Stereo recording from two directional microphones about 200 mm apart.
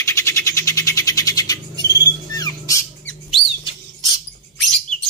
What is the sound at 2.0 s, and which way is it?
Music, 20° left (ahead or behind).